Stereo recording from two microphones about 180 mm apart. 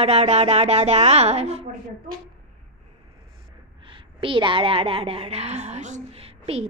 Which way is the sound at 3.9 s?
30° right (ahead or behind).